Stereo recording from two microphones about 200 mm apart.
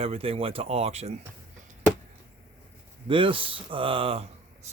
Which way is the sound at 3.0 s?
25° right (ahead or behind).